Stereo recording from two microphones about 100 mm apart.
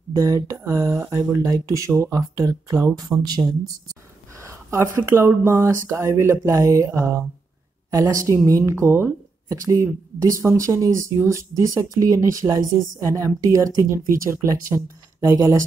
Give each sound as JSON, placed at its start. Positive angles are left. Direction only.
{"t": 0.1, "sound": "speech", "side_deg": -35}
{"t": 4.4, "sound": "speech", "side_deg": -30}